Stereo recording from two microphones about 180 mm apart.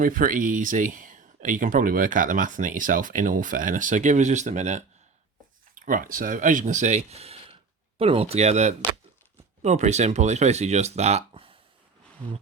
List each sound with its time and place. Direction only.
0.0 s speech: 50° right (ahead or behind)